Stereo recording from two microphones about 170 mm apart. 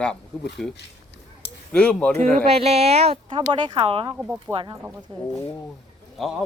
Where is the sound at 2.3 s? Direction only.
35° right (ahead or behind).